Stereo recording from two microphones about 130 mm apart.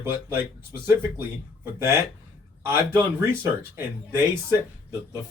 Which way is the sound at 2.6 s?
20° right (ahead or behind).